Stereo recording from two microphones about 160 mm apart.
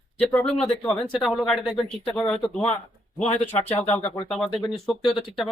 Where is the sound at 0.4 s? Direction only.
5° left (ahead or behind).